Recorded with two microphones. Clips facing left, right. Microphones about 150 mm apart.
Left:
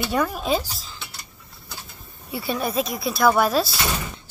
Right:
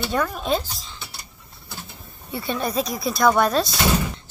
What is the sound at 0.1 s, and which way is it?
Speech, 10° left (ahead or behind).